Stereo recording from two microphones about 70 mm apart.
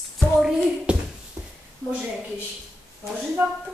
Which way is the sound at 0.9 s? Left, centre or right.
Centre.